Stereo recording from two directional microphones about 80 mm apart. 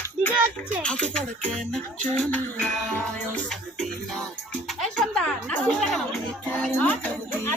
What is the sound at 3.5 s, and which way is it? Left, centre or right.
Music, centre.